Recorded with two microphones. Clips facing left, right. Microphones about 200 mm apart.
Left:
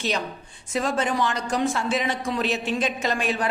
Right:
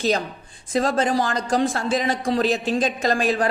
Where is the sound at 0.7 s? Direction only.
35° right (ahead or behind).